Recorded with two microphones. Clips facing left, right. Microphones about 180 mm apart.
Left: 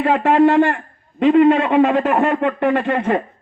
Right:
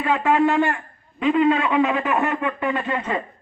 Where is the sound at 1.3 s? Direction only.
55° left (ahead or behind).